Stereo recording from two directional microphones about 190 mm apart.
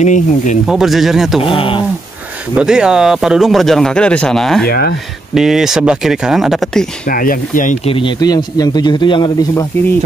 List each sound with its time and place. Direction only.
0.0 s speech: 40° left (ahead or behind)
0.7 s speech: centre (ahead or behind)
1.4 s a man's voice: 25° left (ahead or behind)
2.5 s speech: 5° right (ahead or behind)
4.6 s speech: 55° left (ahead or behind)
5.3 s speech: centre (ahead or behind)
7.1 s speech: 45° left (ahead or behind)
7.8 s a man's voice: 25° left (ahead or behind)